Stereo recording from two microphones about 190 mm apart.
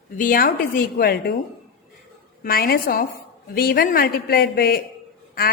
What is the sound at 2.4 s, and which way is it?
A woman's voice, 50° left (ahead or behind).